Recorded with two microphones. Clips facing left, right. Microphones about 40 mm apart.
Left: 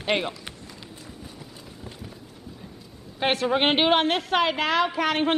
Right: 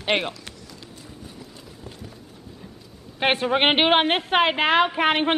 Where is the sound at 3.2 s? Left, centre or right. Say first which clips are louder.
Right 2 dB; right.